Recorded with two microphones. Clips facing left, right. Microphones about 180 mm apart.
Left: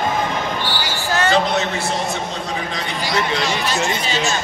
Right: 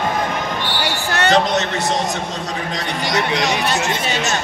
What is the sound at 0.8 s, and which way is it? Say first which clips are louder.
Basketball bounce: right 1 dB; 70° right (ahead or behind).